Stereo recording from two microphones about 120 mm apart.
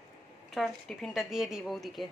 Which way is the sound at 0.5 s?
Centre (ahead or behind).